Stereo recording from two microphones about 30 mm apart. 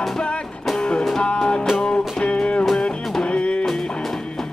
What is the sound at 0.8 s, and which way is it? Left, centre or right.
Music, left.